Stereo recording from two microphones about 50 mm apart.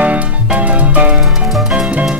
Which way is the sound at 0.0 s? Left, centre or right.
Right.